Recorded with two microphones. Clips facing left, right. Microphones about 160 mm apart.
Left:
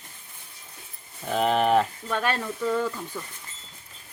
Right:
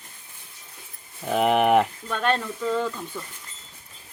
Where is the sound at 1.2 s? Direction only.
10° right (ahead or behind).